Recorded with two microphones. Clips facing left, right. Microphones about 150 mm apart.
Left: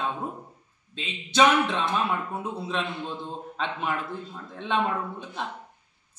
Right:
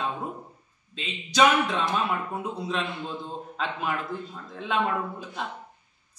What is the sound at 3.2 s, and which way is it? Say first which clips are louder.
Speech: even; 5° right (ahead or behind).